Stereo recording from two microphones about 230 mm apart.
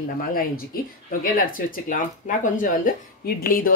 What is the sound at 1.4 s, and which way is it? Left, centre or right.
Speech, left.